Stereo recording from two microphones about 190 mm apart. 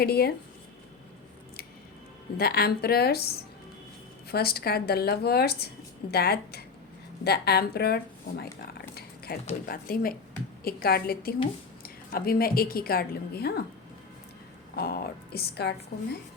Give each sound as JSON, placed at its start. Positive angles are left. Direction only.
{"t": 0.0, "sound": "speech", "side_deg": 55}
{"t": 2.4, "sound": "speech", "side_deg": 55}
{"t": 9.0, "sound": "a sound", "side_deg": 55}
{"t": 9.6, "sound": "a woman's voice", "side_deg": 50}
{"t": 14.8, "sound": "speech", "side_deg": 50}